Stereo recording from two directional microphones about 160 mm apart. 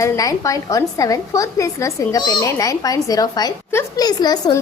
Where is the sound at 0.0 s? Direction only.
20° left (ahead or behind).